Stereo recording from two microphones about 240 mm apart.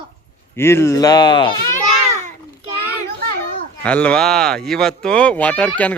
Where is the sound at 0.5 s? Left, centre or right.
Centre.